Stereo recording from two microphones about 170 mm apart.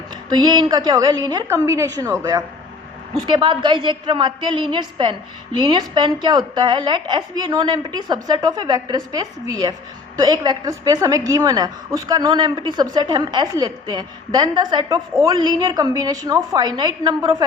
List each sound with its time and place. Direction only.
0.3 s a woman's voice: 25° right (ahead or behind)